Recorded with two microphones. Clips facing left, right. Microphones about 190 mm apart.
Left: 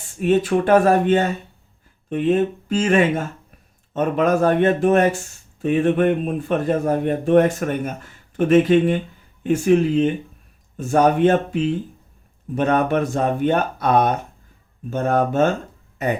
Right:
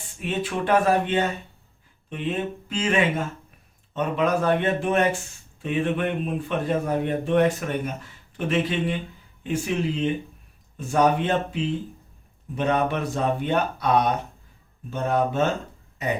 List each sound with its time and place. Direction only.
0.2 s a man's voice: 45° left (ahead or behind)
12.5 s a man's voice: 50° left (ahead or behind)